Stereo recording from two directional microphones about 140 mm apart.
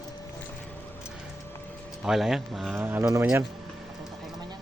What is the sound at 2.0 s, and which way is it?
Speech, 5° right (ahead or behind).